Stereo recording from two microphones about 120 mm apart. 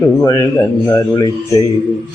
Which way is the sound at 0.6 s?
25° left (ahead or behind).